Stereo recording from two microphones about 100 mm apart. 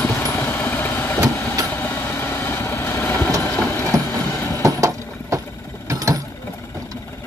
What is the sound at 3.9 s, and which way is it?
Train, 30° right (ahead or behind).